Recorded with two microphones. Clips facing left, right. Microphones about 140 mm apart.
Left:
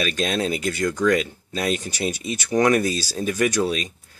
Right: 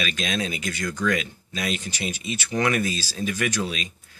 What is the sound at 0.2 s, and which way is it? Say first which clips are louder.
Speech: left 6 dB; 35° left (ahead or behind).